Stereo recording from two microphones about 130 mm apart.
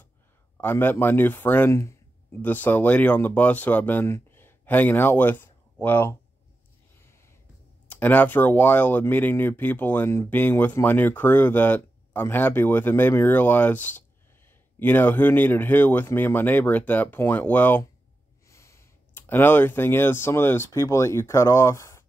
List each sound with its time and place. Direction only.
0.6 s speech: 15° left (ahead or behind)
7.0 s a sound: 20° left (ahead or behind)
7.9 s speech: 10° left (ahead or behind)